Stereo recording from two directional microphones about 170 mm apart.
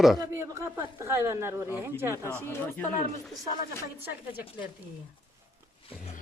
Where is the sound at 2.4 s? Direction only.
15° left (ahead or behind).